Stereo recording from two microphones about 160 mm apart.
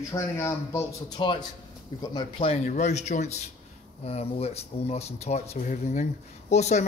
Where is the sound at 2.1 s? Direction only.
35° left (ahead or behind).